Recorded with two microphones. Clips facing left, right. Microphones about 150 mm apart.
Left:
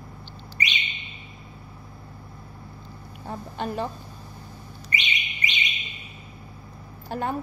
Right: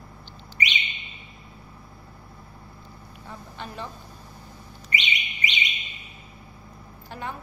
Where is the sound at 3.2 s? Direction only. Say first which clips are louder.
Left 8 dB; 50° left (ahead or behind).